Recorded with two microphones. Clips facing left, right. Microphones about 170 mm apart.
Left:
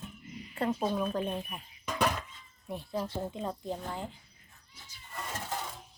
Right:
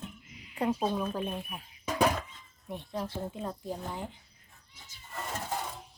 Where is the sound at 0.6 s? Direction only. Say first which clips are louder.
Right 1 dB; 15° right (ahead or behind).